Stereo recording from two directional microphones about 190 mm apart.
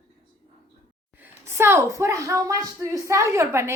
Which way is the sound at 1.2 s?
15° right (ahead or behind).